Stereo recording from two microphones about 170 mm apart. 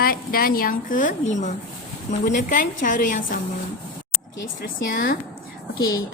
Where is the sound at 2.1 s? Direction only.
50° left (ahead or behind).